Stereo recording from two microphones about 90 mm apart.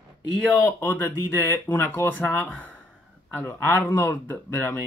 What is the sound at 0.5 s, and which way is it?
Speech, 25° left (ahead or behind).